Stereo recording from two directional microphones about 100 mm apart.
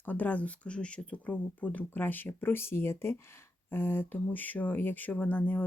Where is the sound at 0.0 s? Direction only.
20° left (ahead or behind).